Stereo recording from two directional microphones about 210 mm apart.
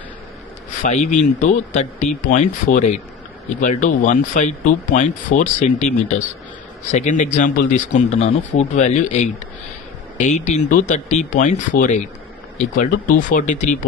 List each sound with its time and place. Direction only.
0.8 s speech: 35° left (ahead or behind)